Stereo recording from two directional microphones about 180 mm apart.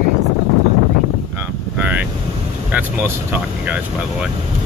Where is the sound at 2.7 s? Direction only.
10° right (ahead or behind).